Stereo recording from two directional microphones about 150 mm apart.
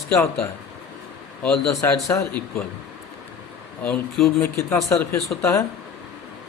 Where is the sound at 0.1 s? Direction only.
5° left (ahead or behind).